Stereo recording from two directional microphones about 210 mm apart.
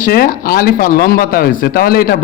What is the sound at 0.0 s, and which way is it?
A man's voice, 45° left (ahead or behind).